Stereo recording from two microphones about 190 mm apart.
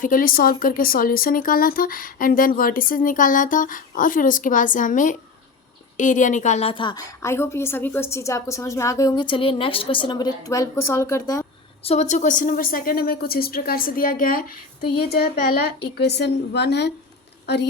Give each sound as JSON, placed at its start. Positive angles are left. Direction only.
{"t": 0.0, "sound": "a woman's voice", "side_deg": 45}
{"t": 11.8, "sound": "a woman's voice", "side_deg": 35}